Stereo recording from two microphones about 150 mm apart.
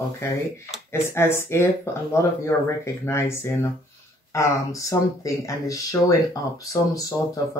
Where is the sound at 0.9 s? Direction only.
15° left (ahead or behind).